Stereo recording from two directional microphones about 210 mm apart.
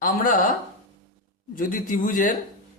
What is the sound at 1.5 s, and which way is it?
Speech, 40° left (ahead or behind).